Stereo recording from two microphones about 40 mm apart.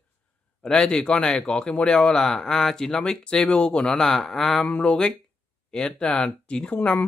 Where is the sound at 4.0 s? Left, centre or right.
Centre.